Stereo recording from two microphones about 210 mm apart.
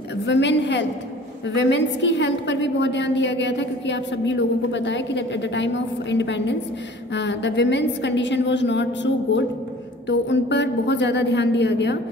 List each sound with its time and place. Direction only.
0.3 s a woman's voice: 55° left (ahead or behind)